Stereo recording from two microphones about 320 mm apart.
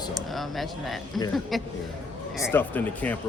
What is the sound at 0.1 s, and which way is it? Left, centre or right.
Speech, centre.